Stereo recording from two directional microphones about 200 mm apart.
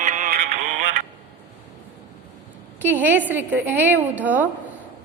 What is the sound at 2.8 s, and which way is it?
A woman's voice, 10° right (ahead or behind).